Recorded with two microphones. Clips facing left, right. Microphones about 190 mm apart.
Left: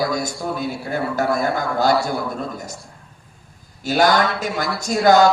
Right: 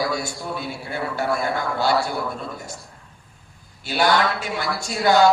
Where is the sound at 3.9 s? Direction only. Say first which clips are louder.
Left 3 dB; 40° left (ahead or behind).